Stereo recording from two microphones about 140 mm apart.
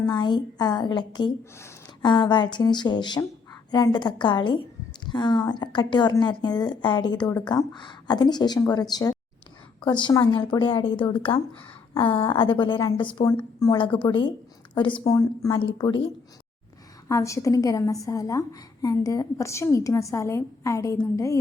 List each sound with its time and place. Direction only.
0.0 s a woman's voice: 30° left (ahead or behind)
15.5 s a woman's voice: 35° left (ahead or behind)
17.1 s a woman's voice: 20° left (ahead or behind)